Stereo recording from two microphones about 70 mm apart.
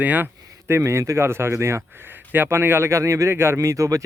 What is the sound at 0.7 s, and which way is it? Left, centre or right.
A man's voice, right.